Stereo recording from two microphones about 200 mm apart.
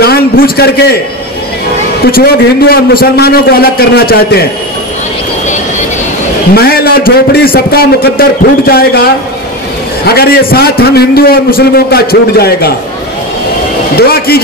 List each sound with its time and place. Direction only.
0.0 s a man's voice: 50° left (ahead or behind)
2.0 s a man's voice: 50° left (ahead or behind)
6.5 s a man's voice: 50° left (ahead or behind)
10.0 s a man's voice: 50° left (ahead or behind)
13.9 s a man's voice: 50° left (ahead or behind)